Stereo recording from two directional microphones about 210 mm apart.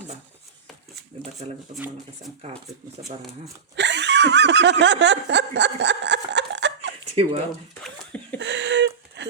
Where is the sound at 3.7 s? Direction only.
55° right (ahead or behind).